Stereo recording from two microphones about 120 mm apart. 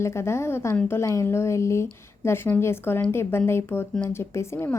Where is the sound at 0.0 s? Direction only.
20° left (ahead or behind).